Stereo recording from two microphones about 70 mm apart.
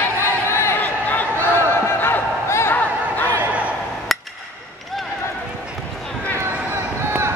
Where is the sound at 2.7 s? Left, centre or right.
Left.